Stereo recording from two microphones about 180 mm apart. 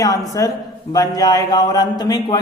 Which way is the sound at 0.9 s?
20° left (ahead or behind).